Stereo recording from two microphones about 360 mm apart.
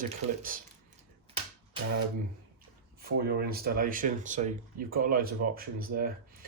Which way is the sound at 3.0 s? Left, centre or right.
Right.